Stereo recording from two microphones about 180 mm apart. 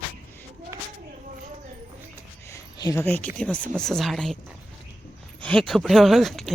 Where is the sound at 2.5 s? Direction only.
20° left (ahead or behind).